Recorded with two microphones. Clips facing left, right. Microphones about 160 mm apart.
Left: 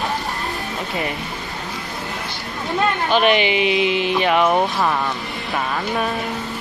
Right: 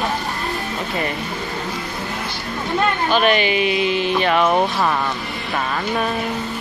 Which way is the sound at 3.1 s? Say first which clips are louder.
Left 1 dB; 15° left (ahead or behind).